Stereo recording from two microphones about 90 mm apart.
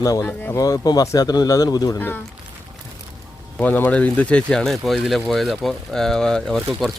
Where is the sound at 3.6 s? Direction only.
20° left (ahead or behind).